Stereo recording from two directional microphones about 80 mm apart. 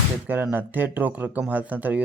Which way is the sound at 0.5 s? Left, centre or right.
Right.